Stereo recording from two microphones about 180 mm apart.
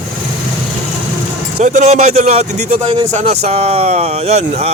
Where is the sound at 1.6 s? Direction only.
40° right (ahead or behind).